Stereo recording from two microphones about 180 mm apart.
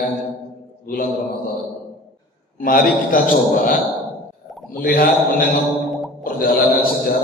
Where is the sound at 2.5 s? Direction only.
50° left (ahead or behind).